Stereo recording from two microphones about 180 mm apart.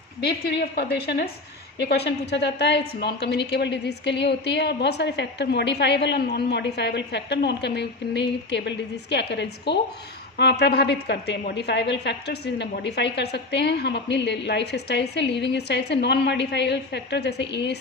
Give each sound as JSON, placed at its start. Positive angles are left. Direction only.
{"t": 0.2, "sound": "a woman's voice", "side_deg": 60}